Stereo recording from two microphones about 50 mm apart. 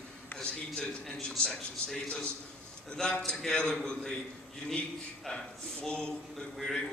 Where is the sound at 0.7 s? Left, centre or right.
Centre.